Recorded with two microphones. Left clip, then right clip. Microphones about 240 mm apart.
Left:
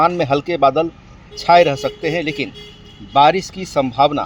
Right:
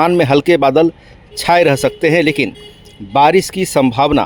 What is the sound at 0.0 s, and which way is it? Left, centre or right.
A man's voice, right.